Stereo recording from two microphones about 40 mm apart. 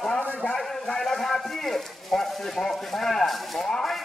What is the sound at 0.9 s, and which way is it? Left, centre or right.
A man's voice, centre.